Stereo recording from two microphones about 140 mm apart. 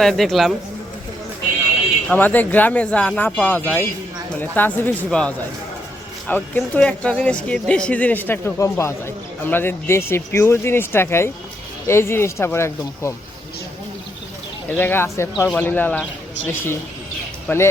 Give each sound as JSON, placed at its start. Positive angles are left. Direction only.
{"t": 0.0, "sound": "a man's voice", "side_deg": 0}
{"t": 2.0, "sound": "speech", "side_deg": 10}
{"t": 14.8, "sound": "speech", "side_deg": 15}
{"t": 17.5, "sound": "speech", "side_deg": 15}